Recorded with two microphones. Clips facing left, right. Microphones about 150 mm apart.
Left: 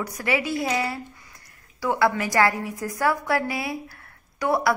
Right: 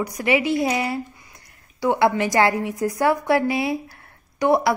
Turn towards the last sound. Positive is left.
turn(degrees=-20)  # may be behind; listen again after turning